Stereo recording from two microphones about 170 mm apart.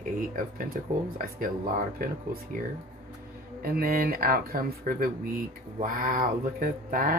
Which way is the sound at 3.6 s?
60° right (ahead or behind).